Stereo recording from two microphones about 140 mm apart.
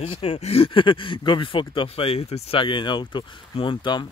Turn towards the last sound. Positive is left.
turn(degrees=35)  # may be behind; listen again after turning